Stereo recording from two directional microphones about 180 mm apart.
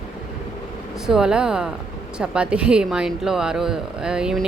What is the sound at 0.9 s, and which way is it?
A woman's voice, centre (ahead or behind).